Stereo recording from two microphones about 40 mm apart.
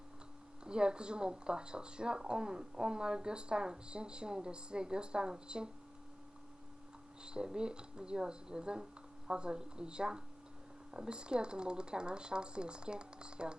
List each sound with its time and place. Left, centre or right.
0.6 s speech: right
7.3 s speech: right